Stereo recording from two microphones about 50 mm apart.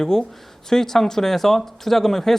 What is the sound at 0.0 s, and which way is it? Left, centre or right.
Speech, centre.